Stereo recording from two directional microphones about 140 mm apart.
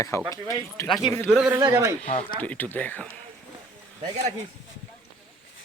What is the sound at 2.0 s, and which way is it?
Speech, 45° left (ahead or behind).